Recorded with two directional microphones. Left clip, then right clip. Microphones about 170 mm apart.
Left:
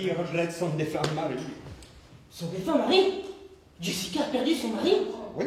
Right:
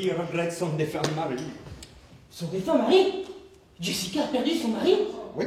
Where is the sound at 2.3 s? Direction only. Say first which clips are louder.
Right 2 dB; 15° left (ahead or behind).